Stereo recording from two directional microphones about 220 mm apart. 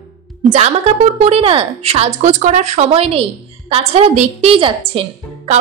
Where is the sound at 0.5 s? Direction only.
30° right (ahead or behind).